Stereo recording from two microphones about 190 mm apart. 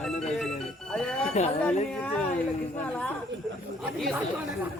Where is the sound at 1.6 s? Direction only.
5° left (ahead or behind).